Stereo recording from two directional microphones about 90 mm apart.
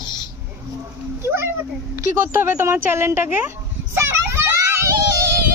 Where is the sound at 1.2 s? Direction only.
25° right (ahead or behind).